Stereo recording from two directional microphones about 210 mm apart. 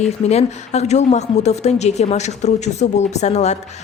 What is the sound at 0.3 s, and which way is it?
A woman's voice, 30° left (ahead or behind).